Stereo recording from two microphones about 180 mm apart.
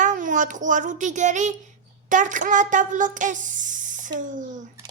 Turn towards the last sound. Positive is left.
turn(degrees=-45)  # may be behind; listen again after turning